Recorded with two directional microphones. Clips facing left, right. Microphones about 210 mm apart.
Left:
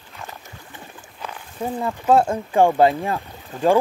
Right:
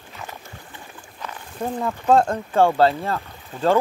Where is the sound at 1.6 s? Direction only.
5° left (ahead or behind).